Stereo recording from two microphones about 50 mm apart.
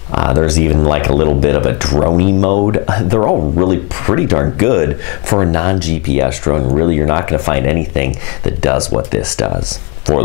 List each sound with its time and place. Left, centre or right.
0.3 s speech: centre